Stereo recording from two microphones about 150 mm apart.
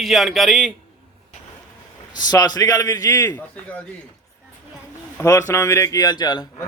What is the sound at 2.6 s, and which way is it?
Speech, 25° left (ahead or behind).